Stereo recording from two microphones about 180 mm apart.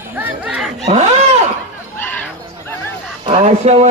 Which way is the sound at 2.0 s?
10° left (ahead or behind).